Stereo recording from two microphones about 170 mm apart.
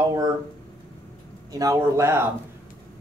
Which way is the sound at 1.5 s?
20° right (ahead or behind).